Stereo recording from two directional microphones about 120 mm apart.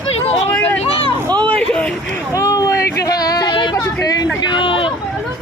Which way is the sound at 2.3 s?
30° left (ahead or behind).